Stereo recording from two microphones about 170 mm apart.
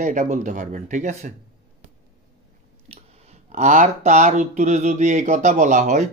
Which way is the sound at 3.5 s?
45° right (ahead or behind).